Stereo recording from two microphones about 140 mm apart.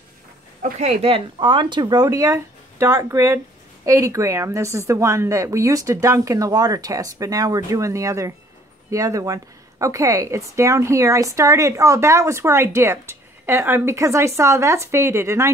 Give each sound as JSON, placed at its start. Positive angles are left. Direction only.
{"t": 0.6, "sound": "speech", "side_deg": -60}